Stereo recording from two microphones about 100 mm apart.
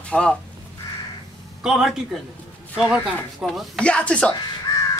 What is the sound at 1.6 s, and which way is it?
Speech, 5° right (ahead or behind).